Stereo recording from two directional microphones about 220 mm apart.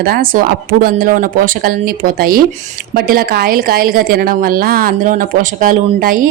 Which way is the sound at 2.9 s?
45° right (ahead or behind).